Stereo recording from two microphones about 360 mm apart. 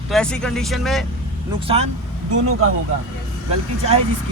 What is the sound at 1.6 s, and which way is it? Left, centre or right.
Speech, centre.